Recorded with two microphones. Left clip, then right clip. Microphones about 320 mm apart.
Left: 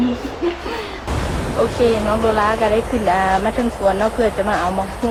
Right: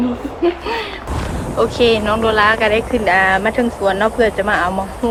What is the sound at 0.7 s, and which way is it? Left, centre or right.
Music, centre.